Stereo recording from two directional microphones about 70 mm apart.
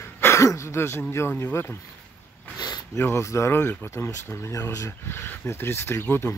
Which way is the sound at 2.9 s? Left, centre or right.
Left.